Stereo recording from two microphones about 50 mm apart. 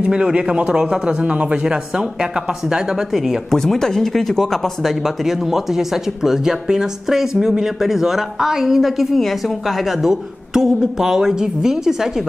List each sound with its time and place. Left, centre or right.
0.0 s speech: centre
3.5 s speech: centre